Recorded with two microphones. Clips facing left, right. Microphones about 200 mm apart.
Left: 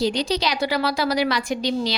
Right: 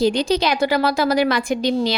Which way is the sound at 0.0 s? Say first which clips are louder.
Right 4 dB; 50° right (ahead or behind).